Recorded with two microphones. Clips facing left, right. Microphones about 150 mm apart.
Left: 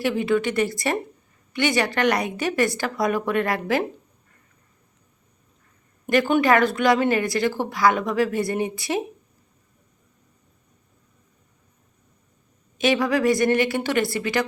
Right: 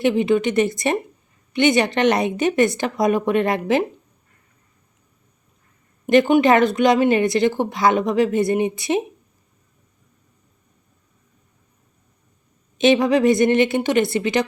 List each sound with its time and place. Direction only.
0.0 s a woman's voice: 20° right (ahead or behind)
6.1 s a woman's voice: 20° right (ahead or behind)
12.8 s a woman's voice: 20° right (ahead or behind)